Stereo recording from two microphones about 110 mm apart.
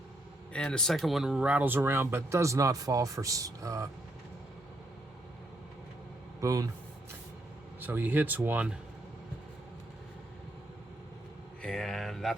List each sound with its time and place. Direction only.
0.5 s speech: 10° left (ahead or behind); by 3.8 s 30° right (ahead or behind)
6.4 s speech: 30° right (ahead or behind)
7.8 s speech: 15° right (ahead or behind)
11.6 s a sound: 5° left (ahead or behind)